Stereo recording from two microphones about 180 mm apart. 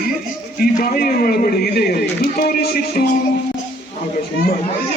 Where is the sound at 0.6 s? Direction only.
55° left (ahead or behind).